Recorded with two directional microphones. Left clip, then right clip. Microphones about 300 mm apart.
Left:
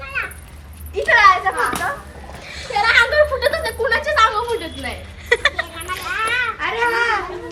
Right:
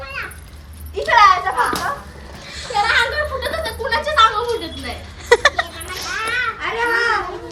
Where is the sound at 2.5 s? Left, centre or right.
Centre.